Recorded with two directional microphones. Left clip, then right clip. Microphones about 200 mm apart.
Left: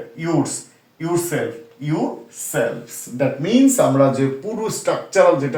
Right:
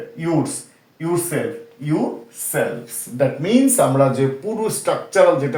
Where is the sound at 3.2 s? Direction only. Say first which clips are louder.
Even; 25° right (ahead or behind).